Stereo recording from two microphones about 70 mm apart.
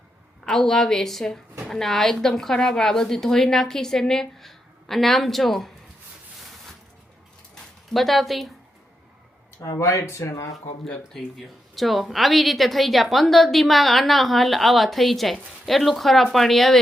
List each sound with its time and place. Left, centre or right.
0.4 s a woman's voice: centre
7.5 s a sound: centre
9.7 s speech: left
11.1 s a woman's voice: centre